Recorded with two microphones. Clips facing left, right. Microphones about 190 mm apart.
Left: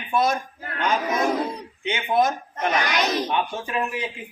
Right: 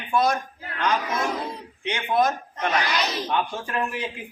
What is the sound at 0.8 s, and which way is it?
A man's voice, 25° left (ahead or behind).